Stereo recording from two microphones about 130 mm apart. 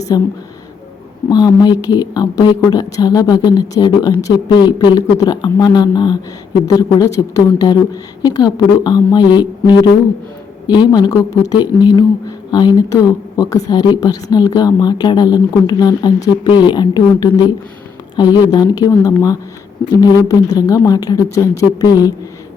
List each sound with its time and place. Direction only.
0.1 s speech: 30° left (ahead or behind)
1.3 s a woman's voice: 30° left (ahead or behind)